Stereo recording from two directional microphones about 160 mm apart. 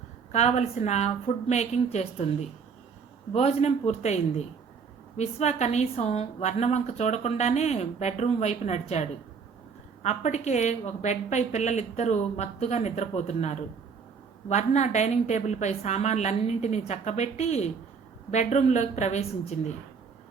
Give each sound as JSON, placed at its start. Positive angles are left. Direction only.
{"t": 0.3, "sound": "a woman's voice", "side_deg": 40}